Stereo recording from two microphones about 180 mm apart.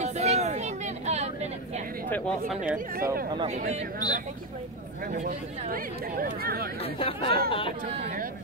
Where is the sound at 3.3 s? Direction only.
35° right (ahead or behind).